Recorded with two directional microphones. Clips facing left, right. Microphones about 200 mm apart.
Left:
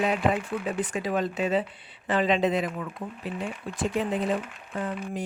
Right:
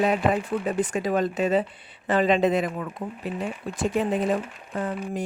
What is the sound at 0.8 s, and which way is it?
Speech, 45° right (ahead or behind).